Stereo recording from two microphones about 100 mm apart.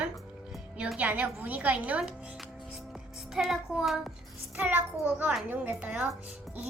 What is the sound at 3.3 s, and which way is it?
Speech, centre (ahead or behind).